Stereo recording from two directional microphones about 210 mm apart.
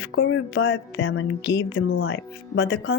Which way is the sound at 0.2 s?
65° left (ahead or behind).